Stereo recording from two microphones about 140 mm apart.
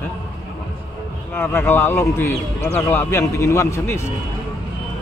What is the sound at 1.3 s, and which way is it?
A man's voice, 15° left (ahead or behind).